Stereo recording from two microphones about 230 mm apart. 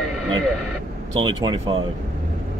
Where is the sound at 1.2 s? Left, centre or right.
Centre.